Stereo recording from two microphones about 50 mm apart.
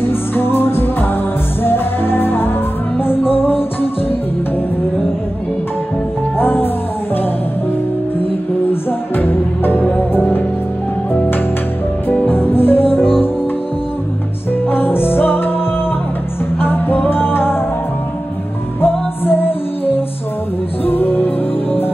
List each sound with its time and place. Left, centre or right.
0.0 s music: left
6.3 s music: left
9.1 s music: left
12.1 s music: left
14.7 s music: left
16.5 s music: left
18.8 s music: left